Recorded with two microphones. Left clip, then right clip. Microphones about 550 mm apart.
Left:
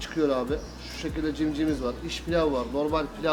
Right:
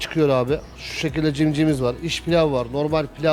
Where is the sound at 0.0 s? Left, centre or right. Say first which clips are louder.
Right 7 dB; right.